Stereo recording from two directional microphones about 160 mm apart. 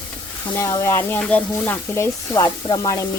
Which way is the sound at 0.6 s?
20° left (ahead or behind).